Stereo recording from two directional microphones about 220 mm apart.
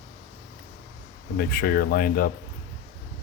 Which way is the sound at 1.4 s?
45° left (ahead or behind).